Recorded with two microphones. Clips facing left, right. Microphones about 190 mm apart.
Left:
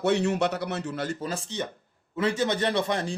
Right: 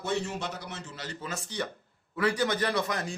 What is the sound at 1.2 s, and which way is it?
Speech, 25° left (ahead or behind).